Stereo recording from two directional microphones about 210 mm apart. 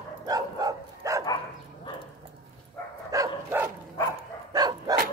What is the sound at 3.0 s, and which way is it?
Dog, 10° right (ahead or behind).